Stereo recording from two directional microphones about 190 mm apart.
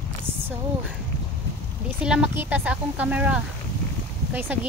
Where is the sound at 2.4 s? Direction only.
10° right (ahead or behind).